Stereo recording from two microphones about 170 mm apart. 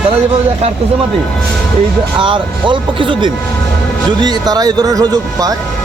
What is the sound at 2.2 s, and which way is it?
Speech, 30° right (ahead or behind).